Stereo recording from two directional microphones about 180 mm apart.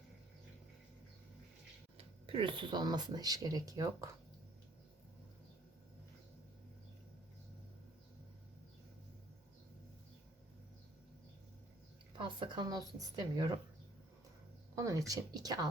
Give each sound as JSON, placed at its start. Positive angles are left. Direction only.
{"t": 2.0, "sound": "speech", "side_deg": -30}
{"t": 12.1, "sound": "speech", "side_deg": -25}
{"t": 14.8, "sound": "speech", "side_deg": -20}